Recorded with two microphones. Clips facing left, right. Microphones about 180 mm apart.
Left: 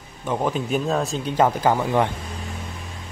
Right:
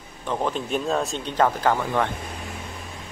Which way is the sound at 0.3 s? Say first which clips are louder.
Left 2 dB; 10° left (ahead or behind).